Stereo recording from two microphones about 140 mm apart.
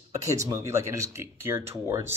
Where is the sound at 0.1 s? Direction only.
20° right (ahead or behind).